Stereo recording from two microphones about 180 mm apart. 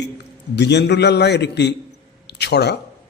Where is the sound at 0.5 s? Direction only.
70° left (ahead or behind).